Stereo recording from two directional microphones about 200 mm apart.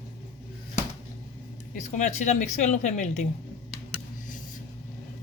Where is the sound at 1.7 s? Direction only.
35° left (ahead or behind).